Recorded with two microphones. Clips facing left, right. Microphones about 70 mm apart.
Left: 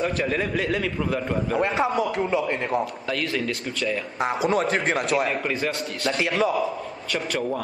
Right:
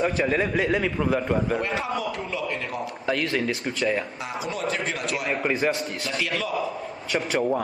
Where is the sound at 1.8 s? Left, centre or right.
Left.